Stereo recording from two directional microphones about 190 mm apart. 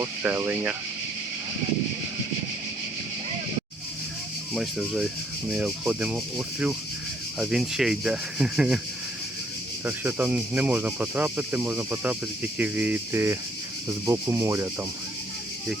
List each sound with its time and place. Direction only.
0.0 s speech: 10° right (ahead or behind)
4.5 s speech: 5° right (ahead or behind)
7.3 s rub: centre (ahead or behind)
9.8 s speech: 10° right (ahead or behind)